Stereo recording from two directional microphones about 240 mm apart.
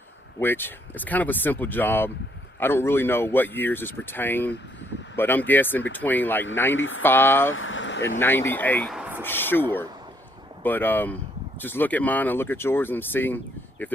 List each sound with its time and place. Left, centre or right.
0.3 s speech: centre
6.7 s speech: left
7.0 s speech: centre
7.5 s vehicle: left
8.2 s speech: centre
9.2 s speech: centre